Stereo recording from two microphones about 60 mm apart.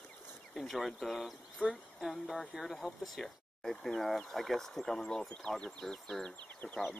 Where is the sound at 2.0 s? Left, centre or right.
Centre.